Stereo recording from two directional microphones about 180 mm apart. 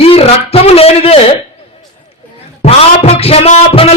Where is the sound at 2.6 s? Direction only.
35° left (ahead or behind).